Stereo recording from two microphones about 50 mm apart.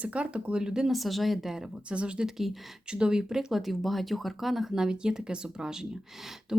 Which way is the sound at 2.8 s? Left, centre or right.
Centre.